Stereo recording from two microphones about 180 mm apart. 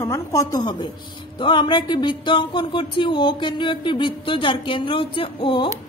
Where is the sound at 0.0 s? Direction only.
15° left (ahead or behind).